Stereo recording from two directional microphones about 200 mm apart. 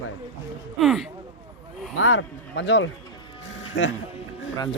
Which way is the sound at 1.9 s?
80° left.